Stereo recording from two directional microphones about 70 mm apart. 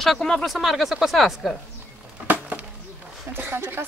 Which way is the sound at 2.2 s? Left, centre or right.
Right.